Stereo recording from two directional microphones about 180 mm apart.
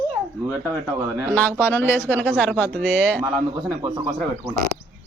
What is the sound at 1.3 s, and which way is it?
Speech, 10° left (ahead or behind).